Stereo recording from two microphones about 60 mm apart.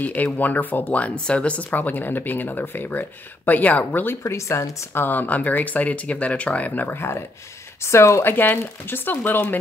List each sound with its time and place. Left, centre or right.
0.0 s speech: left
4.2 s speech: left
4.9 s speech: left
7.8 s speech: left
8.2 s speech: left